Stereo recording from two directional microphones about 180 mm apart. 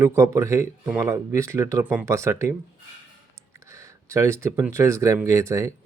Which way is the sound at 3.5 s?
15° right (ahead or behind).